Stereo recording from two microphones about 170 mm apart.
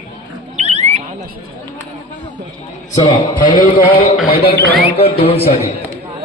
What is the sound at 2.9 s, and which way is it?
Speech, 45° left (ahead or behind).